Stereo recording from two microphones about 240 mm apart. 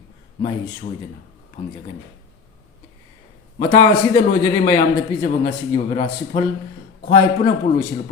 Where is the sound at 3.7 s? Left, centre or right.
Centre.